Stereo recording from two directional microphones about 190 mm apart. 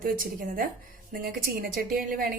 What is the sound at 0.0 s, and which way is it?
Speech, 45° right (ahead or behind).